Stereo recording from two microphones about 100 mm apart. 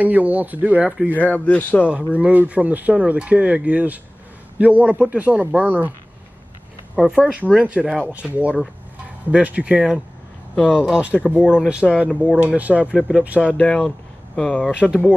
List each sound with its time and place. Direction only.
0.0 s speech: 15° right (ahead or behind)
1.1 s speech: 15° left (ahead or behind)
2.1 s speech: 15° right (ahead or behind)
7.0 s speech: 10° right (ahead or behind)
10.5 s speech: 10° left (ahead or behind)
10.9 s speech: 10° right (ahead or behind)
11.1 s speech: 15° left (ahead or behind)
11.5 s speech: 10° right (ahead or behind)
13.6 s speech: 10° left (ahead or behind)
14.8 s speech: 15° right (ahead or behind)